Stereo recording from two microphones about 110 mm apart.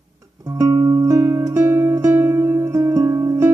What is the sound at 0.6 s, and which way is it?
Music, 30° right (ahead or behind).